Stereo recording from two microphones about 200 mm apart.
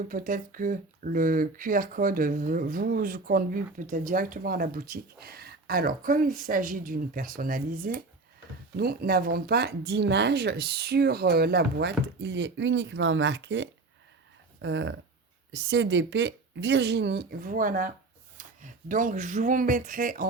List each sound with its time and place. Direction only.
0.1 s speech: 45° right (ahead or behind)